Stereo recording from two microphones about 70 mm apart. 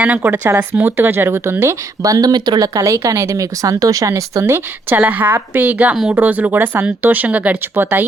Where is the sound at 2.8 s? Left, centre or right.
Right.